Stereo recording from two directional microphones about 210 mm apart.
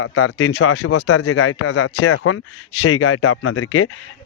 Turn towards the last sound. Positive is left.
turn(degrees=80)